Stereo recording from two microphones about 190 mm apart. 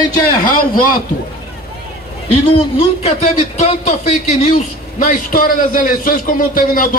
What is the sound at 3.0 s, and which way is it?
A man's voice, 35° left (ahead or behind).